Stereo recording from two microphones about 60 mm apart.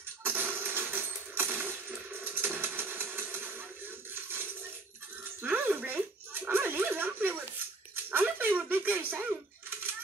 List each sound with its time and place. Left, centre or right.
0.2 s a sound: right
2.1 s music: right
6.4 s dog: right